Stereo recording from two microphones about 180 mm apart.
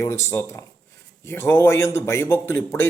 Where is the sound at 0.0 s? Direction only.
15° left (ahead or behind).